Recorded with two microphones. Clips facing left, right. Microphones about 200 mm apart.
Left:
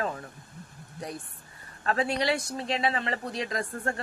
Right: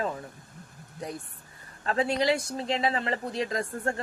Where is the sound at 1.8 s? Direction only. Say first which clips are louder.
Right 2 dB; 30° right (ahead or behind).